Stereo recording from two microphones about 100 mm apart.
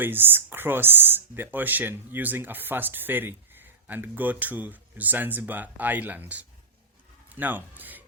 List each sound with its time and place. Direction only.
0.0 s speech: 20° right (ahead or behind)